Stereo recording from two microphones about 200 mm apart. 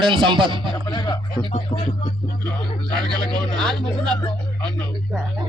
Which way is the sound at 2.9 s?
20° right (ahead or behind).